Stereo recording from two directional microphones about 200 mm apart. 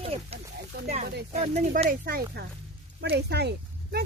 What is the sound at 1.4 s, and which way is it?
Speech, 35° right (ahead or behind).